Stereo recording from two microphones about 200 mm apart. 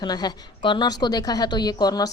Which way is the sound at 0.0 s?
20° left (ahead or behind).